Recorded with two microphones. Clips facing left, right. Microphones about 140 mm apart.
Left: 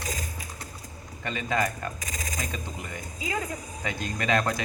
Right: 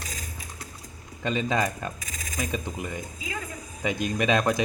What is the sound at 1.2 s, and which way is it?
Speech, 20° right (ahead or behind).